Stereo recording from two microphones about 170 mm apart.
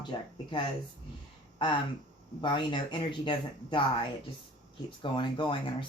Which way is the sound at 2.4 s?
30° left (ahead or behind).